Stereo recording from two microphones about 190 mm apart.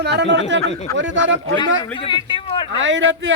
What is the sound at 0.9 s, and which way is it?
Speech, 80° right.